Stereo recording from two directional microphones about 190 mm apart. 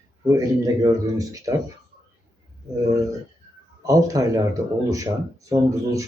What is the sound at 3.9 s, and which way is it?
Speech, 20° right (ahead or behind).